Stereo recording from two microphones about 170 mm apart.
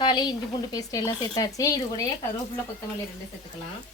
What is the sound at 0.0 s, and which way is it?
Speech, 25° left (ahead or behind).